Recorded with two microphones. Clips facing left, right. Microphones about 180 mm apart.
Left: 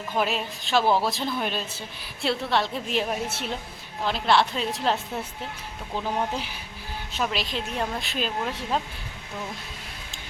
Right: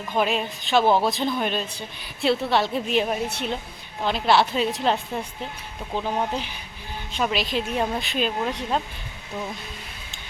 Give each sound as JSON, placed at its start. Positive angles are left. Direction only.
{"t": 0.2, "sound": "a woman's voice", "side_deg": 0}